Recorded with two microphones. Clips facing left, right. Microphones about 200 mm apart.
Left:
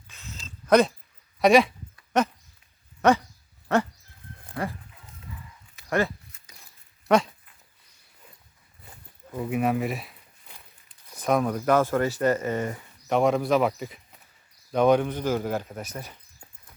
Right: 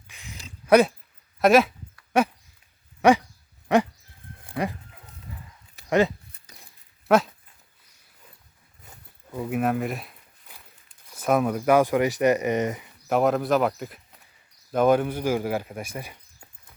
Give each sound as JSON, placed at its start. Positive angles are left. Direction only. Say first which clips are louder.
{"t": 0.1, "sound": "a sound", "louder": "even", "side_deg": -15}
{"t": 1.4, "sound": "speech", "louder": "even", "side_deg": 0}
{"t": 3.0, "sound": "dog", "louder": "right 2 dB", "side_deg": -10}
{"t": 3.7, "sound": "speech", "louder": "right 3 dB", "side_deg": -15}
{"t": 4.5, "sound": "chicken", "louder": "right 3 dB", "side_deg": -15}
{"t": 5.9, "sound": "speech", "louder": "right 4 dB", "side_deg": -20}
{"t": 7.1, "sound": "speech", "louder": "right 1 dB", "side_deg": -5}
{"t": 9.3, "sound": "a sound", "louder": "even", "side_deg": 0}
{"t": 11.2, "sound": "speech", "louder": "right 1 dB", "side_deg": -5}
{"t": 13.1, "sound": "speech", "louder": "even", "side_deg": -5}